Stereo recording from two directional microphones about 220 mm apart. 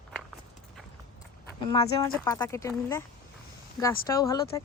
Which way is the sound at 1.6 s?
20° left (ahead or behind).